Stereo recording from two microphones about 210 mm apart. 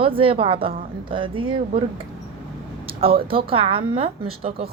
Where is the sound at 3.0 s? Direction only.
25° right (ahead or behind).